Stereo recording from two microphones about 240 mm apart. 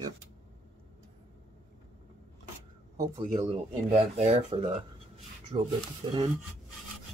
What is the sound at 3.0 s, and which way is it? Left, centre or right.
Speech, centre.